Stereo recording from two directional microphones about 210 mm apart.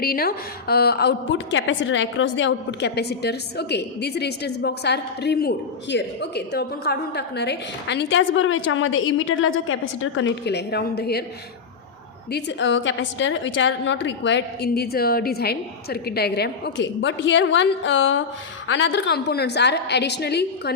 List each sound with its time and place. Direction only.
0.0 s a woman's voice: 45° left (ahead or behind)
12.3 s a woman's voice: 60° left (ahead or behind)